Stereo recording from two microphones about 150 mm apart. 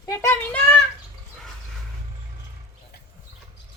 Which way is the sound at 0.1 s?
20° left (ahead or behind).